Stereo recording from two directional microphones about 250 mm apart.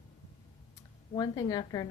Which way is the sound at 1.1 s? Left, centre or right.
Centre.